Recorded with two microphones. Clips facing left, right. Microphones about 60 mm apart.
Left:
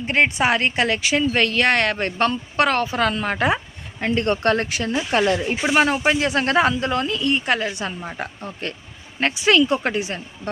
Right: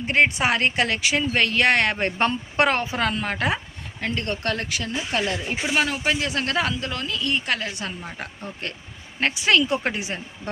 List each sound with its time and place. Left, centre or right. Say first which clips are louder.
0.0 s a woman's voice: left 1 dB; centre
4.0 s a woman's voice: left 7 dB; left; by 10.5 s centre